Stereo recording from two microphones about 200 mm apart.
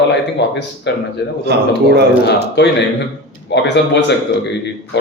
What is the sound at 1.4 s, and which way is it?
Speech, 55° right (ahead or behind).